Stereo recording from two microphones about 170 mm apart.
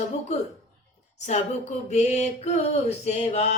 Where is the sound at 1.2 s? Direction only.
40° left (ahead or behind).